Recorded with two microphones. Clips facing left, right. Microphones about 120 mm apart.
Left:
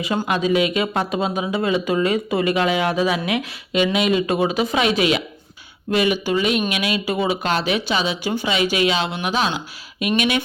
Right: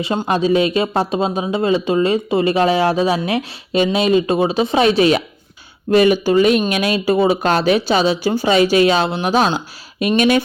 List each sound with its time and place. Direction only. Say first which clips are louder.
0.0 s speech: right 3 dB; 30° right (ahead or behind)